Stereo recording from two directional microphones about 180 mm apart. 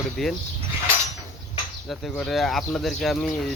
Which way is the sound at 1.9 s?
Centre (ahead or behind).